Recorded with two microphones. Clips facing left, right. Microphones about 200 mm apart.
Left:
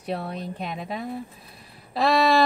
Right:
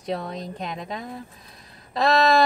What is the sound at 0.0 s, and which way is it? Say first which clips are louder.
Speech: right 1 dB; 10° left (ahead or behind).